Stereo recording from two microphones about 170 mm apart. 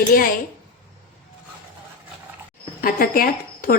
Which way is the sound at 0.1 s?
55° left (ahead or behind).